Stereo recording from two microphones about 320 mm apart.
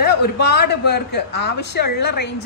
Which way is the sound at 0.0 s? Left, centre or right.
Left.